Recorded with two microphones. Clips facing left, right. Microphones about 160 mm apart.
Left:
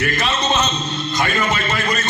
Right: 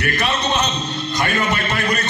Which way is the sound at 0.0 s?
65° right (ahead or behind).